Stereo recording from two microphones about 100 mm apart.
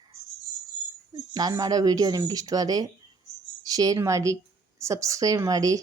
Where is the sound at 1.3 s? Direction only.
40° right (ahead or behind).